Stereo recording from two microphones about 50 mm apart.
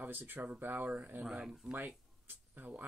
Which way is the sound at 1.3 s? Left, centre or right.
Centre.